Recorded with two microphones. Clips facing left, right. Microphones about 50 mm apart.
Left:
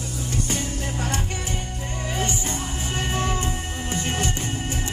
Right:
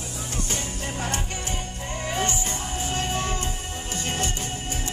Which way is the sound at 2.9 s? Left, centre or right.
Centre.